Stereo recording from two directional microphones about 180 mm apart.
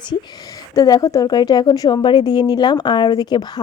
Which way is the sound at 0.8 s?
20° left (ahead or behind).